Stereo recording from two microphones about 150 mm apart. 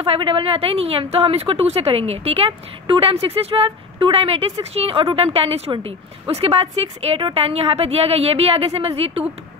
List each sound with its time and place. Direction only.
0.0 s a woman's voice: 40° right (ahead or behind)